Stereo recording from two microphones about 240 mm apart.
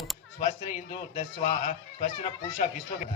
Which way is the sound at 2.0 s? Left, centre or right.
Left.